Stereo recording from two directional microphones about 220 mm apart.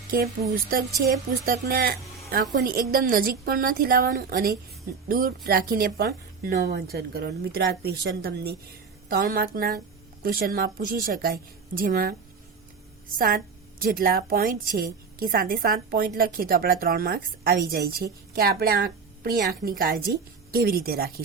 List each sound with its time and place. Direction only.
0.5 s a woman's voice: 40° right (ahead or behind)